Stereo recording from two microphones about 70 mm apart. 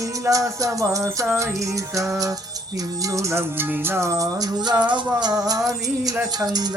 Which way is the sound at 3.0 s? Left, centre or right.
Right.